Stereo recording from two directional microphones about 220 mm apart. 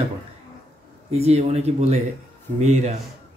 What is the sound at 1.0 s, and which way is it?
Speech, 30° right (ahead or behind).